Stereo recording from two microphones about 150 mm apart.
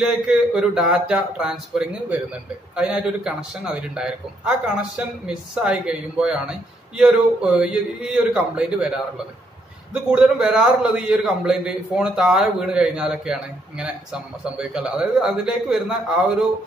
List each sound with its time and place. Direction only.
0.0 s a man's voice: 5° right (ahead or behind)
9.9 s a man's voice: 5° right (ahead or behind)